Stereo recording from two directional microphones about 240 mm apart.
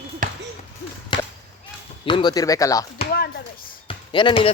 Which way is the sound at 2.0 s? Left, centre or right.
Centre.